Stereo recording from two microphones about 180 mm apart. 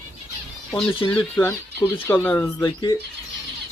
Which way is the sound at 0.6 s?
Centre (ahead or behind).